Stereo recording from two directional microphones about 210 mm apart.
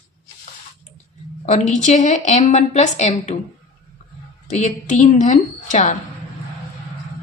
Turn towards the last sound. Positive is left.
turn(degrees=35)  # may be behind; listen again after turning